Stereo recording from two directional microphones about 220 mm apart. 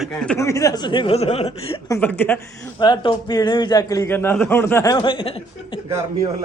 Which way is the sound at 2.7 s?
20° left (ahead or behind).